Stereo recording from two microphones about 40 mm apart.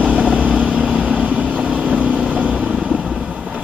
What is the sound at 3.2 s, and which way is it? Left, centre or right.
Boat, centre.